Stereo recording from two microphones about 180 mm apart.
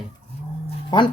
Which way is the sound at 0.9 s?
25° left (ahead or behind).